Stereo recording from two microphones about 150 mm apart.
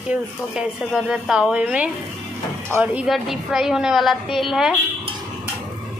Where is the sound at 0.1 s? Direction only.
5° right (ahead or behind).